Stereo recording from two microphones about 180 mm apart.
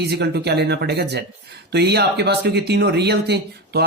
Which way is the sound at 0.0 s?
65° right (ahead or behind).